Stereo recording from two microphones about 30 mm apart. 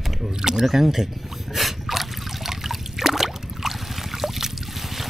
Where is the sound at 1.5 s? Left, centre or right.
Centre.